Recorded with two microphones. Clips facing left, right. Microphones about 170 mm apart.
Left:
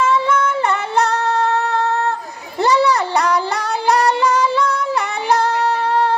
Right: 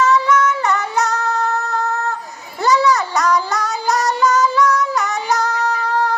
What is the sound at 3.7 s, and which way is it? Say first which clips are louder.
Music: left 6 dB; 60° left (ahead or behind).